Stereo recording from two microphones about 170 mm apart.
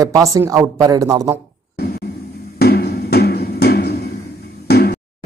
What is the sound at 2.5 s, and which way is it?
Music, 70° left (ahead or behind).